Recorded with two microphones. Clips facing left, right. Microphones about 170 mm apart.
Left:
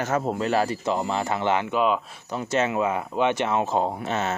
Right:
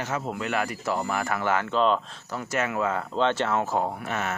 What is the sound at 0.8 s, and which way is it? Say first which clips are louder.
Speech: left 2 dB; 20° left (ahead or behind).